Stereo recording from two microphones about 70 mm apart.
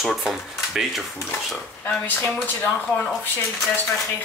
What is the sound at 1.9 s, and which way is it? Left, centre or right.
Speech, left.